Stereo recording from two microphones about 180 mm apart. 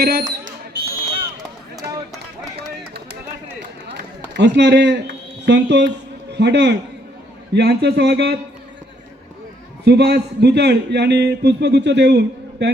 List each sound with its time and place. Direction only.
0.0 s speech: 55° right (ahead or behind)
3.9 s a sound: 70° right (ahead or behind)
6.3 s a man's voice: 70° right (ahead or behind)
9.8 s a man's voice: 65° right (ahead or behind)